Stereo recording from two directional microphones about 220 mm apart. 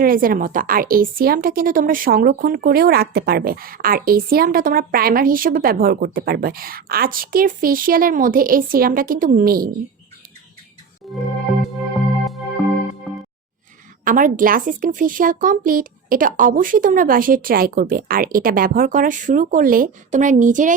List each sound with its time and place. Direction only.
0.0 s speech: 40° right (ahead or behind)
11.0 s music: centre (ahead or behind)
13.1 s music: centre (ahead or behind)
14.0 s speech: 35° right (ahead or behind)